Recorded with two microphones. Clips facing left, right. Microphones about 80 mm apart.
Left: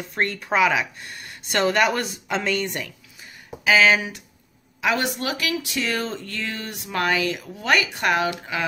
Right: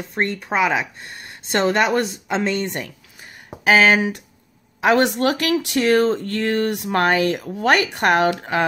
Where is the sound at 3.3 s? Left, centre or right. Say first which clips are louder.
Right 3 dB; right.